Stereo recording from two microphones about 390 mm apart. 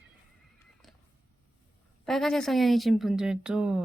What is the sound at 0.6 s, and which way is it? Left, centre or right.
Neigh, centre.